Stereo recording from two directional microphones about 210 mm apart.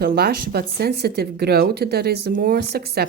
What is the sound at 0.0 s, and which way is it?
Speech, 45° right (ahead or behind).